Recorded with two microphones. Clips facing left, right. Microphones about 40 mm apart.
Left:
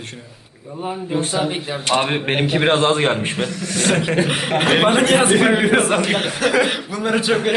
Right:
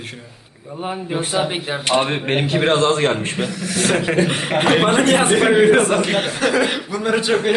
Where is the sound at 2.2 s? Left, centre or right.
Centre.